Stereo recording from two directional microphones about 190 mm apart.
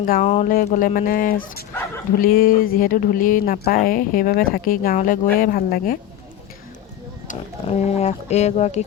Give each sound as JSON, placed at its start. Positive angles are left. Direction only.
{"t": 0.0, "sound": "speech", "side_deg": 45}
{"t": 0.3, "sound": "speech", "side_deg": 35}
{"t": 0.5, "sound": "speech", "side_deg": 45}
{"t": 7.3, "sound": "speech", "side_deg": 35}